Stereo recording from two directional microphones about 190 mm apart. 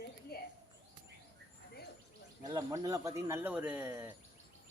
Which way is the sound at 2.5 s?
20° right (ahead or behind).